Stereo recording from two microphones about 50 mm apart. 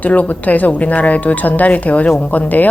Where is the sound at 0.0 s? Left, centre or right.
Left.